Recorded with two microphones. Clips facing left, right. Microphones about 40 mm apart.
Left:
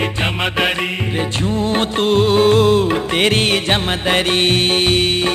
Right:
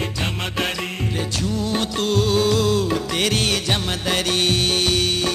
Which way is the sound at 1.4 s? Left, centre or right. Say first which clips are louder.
Left 5 dB; left.